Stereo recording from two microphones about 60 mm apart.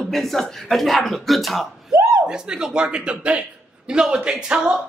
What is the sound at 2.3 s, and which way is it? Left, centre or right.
Speech, centre.